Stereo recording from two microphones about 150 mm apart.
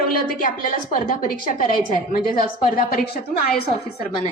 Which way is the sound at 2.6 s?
80° left.